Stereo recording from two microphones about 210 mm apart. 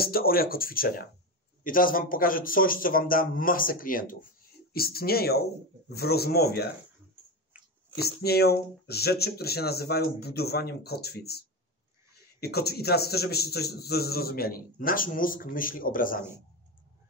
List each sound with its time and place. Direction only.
0.0 s speech: 45° left (ahead or behind)
7.9 s speech: 50° left (ahead or behind)